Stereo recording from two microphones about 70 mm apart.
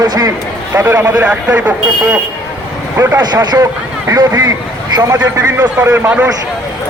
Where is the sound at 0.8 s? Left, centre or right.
Right.